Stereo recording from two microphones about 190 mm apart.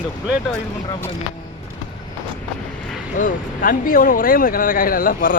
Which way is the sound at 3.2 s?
45° left (ahead or behind).